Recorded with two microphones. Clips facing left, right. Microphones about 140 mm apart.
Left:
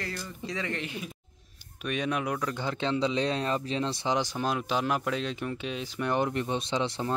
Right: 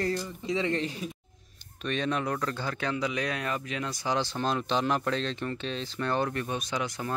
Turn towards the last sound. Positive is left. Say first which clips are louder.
# left 3 dB
turn(degrees=25)  # may be behind; listen again after turning